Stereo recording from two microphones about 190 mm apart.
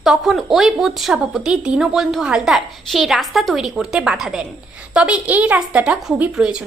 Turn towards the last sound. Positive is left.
turn(degrees=-5)  # may be behind; listen again after turning